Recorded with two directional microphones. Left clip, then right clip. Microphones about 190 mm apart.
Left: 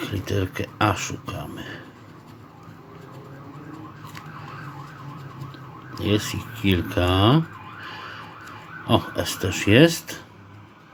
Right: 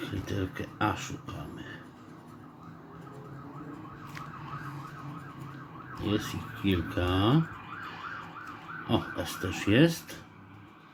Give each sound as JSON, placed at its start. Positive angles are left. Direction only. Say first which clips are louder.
{"t": 0.0, "sound": "speech", "louder": "left 8 dB", "side_deg": 35}
{"t": 5.9, "sound": "fowl", "louder": "left 8 dB", "side_deg": 35}
{"t": 8.9, "sound": "fowl", "louder": "left 9 dB", "side_deg": 35}